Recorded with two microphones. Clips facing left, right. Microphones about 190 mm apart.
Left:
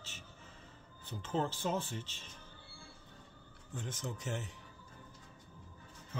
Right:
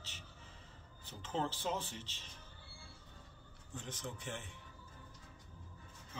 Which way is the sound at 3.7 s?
45° left (ahead or behind).